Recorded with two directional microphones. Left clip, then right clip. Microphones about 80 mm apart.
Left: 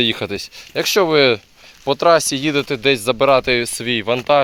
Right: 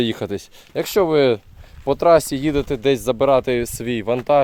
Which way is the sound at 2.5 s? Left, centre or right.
Right.